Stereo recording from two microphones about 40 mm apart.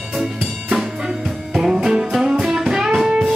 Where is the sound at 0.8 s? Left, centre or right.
Centre.